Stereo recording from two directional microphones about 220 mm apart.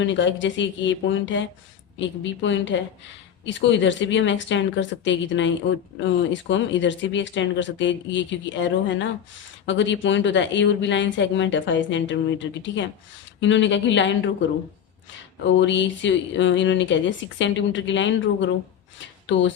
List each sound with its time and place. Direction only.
0.0 s speech: 55° left (ahead or behind)
15.5 s speech: 55° left (ahead or behind)